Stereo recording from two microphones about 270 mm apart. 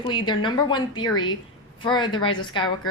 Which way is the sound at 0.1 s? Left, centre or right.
Centre.